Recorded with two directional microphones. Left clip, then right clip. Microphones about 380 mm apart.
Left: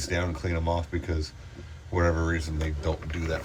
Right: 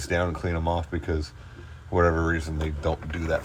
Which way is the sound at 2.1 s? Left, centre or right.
Right.